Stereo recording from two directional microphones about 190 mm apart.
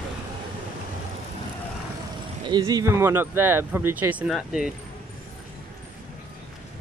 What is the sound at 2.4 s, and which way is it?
Speech, 25° right (ahead or behind).